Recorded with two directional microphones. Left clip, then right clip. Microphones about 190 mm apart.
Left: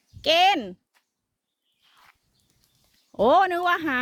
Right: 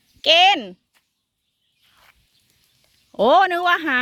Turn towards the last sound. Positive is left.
turn(degrees=0)  # may be behind; listen again after turning